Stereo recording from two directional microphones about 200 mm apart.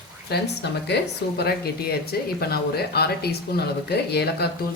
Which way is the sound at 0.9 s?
55° left (ahead or behind).